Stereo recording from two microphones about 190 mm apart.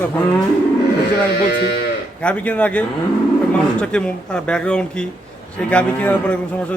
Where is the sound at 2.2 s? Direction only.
5° left (ahead or behind).